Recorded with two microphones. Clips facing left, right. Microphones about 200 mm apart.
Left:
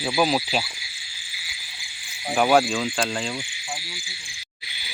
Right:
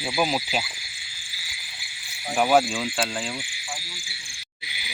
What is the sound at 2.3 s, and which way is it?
Speech, 5° right (ahead or behind).